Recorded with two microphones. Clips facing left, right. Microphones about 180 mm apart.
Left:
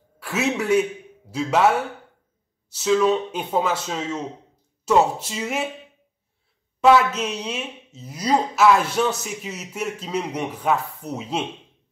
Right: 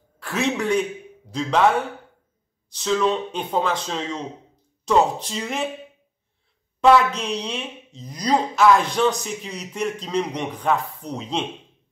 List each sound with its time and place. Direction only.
0.2 s a man's voice: 5° left (ahead or behind)
6.8 s speech: 5° left (ahead or behind)